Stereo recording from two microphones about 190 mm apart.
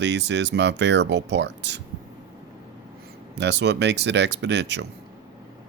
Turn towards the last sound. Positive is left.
turn(degrees=-65)  # may be behind; listen again after turning